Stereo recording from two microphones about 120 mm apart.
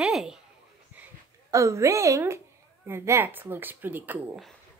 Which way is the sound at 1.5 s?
25° right (ahead or behind).